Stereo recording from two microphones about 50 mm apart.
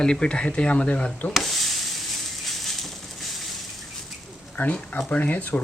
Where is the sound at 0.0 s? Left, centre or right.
Centre.